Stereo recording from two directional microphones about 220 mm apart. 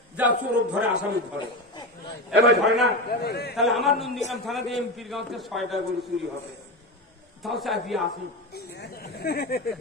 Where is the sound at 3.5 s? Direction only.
Centre (ahead or behind).